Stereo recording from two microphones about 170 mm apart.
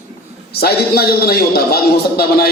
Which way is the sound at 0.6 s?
65° left (ahead or behind).